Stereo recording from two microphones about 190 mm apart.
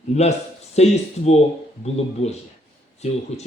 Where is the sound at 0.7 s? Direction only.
35° left (ahead or behind).